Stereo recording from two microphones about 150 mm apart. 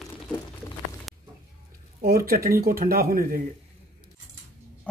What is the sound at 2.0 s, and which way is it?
Speech, 80° right.